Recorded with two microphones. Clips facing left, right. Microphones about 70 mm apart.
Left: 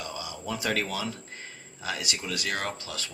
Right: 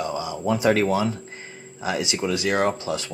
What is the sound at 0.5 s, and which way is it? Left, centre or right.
Speech, right.